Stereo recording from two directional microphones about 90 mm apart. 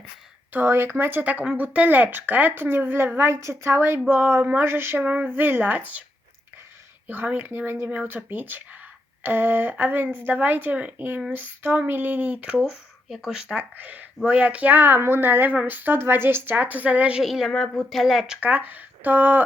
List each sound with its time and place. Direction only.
0.5 s speech: 25° right (ahead or behind)
5.0 s speech: 15° right (ahead or behind)
7.1 s speech: 20° right (ahead or behind)
12.5 s speech: 5° right (ahead or behind)
17.2 s speech: centre (ahead or behind)
18.3 s speech: 15° right (ahead or behind)